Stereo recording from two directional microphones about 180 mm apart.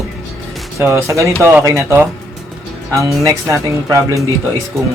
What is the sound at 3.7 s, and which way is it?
Speech, 15° right (ahead or behind).